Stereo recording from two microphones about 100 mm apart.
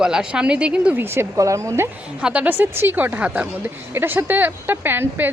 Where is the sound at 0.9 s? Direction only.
25° right (ahead or behind).